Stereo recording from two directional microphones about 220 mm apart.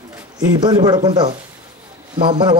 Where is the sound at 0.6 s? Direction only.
20° right (ahead or behind).